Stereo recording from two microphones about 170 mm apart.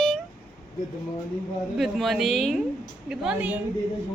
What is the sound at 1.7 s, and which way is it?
A woman's voice, centre (ahead or behind).